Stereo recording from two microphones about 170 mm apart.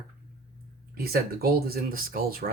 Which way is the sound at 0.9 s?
65° right (ahead or behind).